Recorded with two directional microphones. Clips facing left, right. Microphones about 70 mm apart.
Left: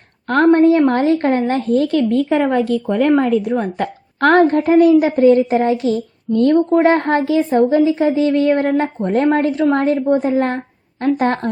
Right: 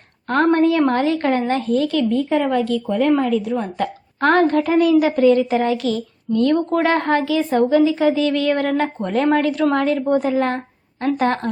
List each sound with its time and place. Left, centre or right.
0.3 s a woman's voice: left
2.0 s a woman's voice: left